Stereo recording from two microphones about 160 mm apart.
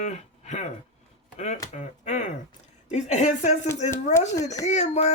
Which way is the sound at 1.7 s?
45° left (ahead or behind).